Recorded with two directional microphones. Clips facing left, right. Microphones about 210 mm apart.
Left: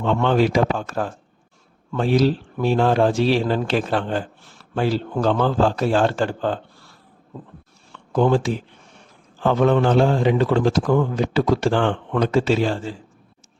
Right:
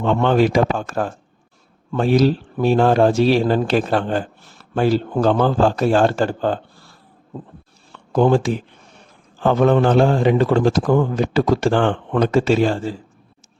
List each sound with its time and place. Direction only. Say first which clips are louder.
0.0 s a man's voice: right 2 dB; 50° right (ahead or behind)
8.1 s a man's voice: right 3 dB; 45° right (ahead or behind)